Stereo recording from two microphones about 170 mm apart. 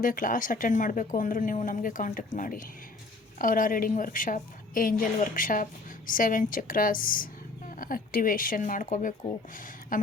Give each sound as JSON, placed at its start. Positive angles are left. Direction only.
{"t": 0.0, "sound": "a woman's voice", "side_deg": 55}